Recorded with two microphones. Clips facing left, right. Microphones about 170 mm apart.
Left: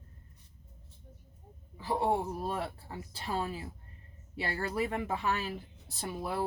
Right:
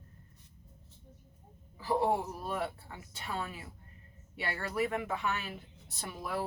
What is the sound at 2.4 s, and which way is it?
Speech, 35° left (ahead or behind).